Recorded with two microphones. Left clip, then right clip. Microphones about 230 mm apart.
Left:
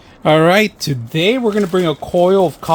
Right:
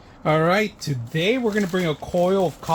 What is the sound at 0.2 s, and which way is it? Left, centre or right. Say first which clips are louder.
Speech: left 8 dB; left.